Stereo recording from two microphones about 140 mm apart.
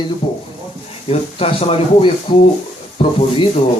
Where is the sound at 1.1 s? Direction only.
45° left (ahead or behind).